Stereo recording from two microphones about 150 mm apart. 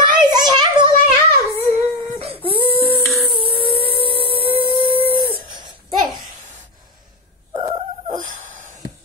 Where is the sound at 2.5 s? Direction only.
35° right (ahead or behind).